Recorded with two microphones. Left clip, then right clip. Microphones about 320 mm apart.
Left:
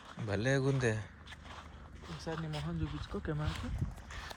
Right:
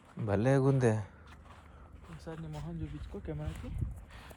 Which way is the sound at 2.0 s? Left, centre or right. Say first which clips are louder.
Left 5 dB; left.